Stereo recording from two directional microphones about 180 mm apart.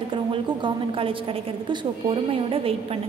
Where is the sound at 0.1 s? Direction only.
25° right (ahead or behind).